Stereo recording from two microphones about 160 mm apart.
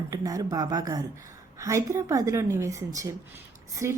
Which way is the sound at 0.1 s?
20° right (ahead or behind).